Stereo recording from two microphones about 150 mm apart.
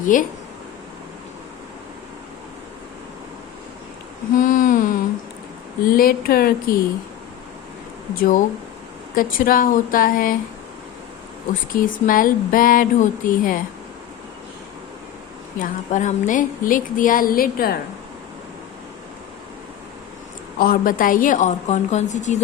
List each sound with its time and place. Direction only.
0.0 s speech: 60° left (ahead or behind)
4.4 s a sound: 65° left (ahead or behind)
5.9 s speech: 75° left (ahead or behind)
8.1 s speech: 65° left (ahead or behind)
11.7 s speech: 65° left (ahead or behind)
15.6 s speech: 55° left (ahead or behind); by 17.7 s 80° left
20.6 s speech: 75° left (ahead or behind); by 22.4 s 50° left (ahead or behind)